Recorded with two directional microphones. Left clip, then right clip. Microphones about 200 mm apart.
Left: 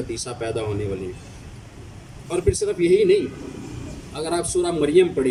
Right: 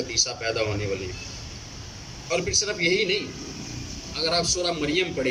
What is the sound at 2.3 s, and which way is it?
A man's voice, 40° left (ahead or behind).